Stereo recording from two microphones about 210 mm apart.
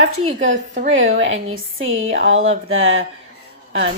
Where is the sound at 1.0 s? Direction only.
70° right (ahead or behind).